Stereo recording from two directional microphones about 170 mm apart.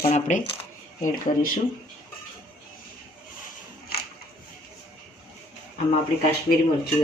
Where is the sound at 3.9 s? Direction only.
65° left (ahead or behind).